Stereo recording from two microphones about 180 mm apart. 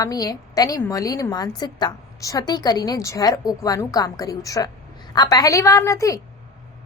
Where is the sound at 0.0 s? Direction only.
20° left (ahead or behind).